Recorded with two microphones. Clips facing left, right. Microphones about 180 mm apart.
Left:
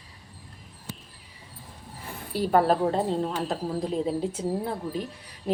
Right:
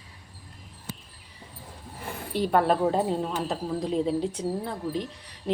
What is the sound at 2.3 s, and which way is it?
A woman's voice, centre (ahead or behind).